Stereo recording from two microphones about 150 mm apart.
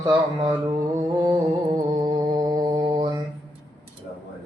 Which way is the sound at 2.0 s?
25° right (ahead or behind).